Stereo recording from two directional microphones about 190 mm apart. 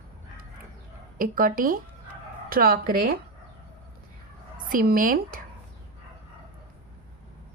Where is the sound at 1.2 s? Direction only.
45° right (ahead or behind).